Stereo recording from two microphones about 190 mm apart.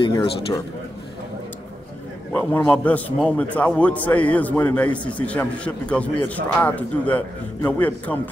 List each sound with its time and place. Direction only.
0.0 s a man's voice: 25° left (ahead or behind)
2.3 s a man's voice: 10° left (ahead or behind)